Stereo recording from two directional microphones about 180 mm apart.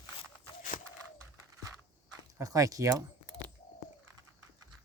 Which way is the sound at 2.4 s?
20° right (ahead or behind).